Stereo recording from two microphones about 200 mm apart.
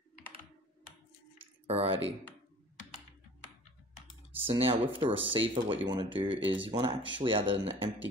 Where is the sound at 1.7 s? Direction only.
30° right (ahead or behind).